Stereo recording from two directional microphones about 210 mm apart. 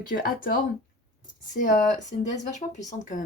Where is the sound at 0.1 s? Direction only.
45° left (ahead or behind).